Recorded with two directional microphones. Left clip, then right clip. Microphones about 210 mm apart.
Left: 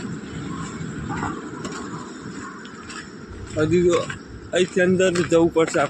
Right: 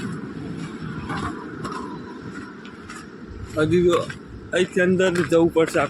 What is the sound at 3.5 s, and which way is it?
A man's voice, 10° right (ahead or behind).